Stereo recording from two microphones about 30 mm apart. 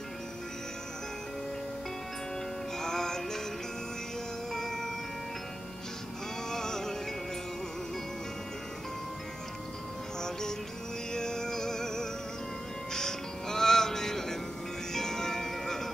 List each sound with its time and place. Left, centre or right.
2.8 s music: centre
4.5 s music: centre
6.5 s music: centre
11.1 s music: centre
14.9 s bell: centre